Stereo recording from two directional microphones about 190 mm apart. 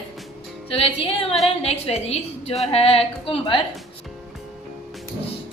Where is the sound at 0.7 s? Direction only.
30° left (ahead or behind).